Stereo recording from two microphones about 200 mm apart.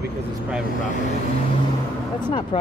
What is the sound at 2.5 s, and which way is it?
Speech, 25° left (ahead or behind).